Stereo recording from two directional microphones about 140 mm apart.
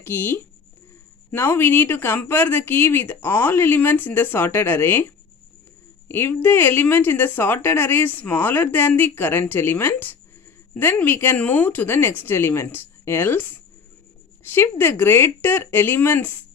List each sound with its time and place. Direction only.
0.0 s speech: 15° left (ahead or behind)